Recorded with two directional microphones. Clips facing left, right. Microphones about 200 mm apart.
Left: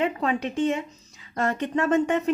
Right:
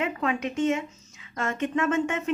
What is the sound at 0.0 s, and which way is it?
Speech, 35° left (ahead or behind).